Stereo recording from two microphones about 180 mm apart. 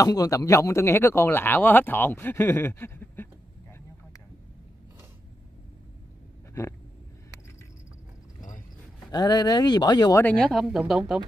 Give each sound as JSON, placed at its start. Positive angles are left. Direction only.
{"t": 0.0, "sound": "speech", "side_deg": 20}
{"t": 8.4, "sound": "vehicle", "side_deg": 45}
{"t": 9.1, "sound": "speech", "side_deg": 20}
{"t": 10.2, "sound": "speech", "side_deg": 5}